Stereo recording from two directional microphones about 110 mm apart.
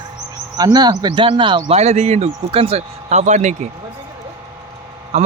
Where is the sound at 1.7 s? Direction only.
85° right.